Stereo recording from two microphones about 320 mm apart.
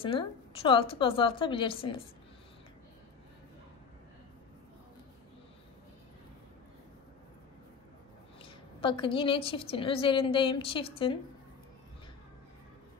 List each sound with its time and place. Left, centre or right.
0.0 s a woman's voice: centre
8.4 s a woman's voice: centre